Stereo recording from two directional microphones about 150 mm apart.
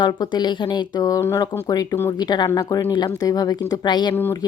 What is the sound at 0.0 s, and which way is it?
Speech, 30° left (ahead or behind).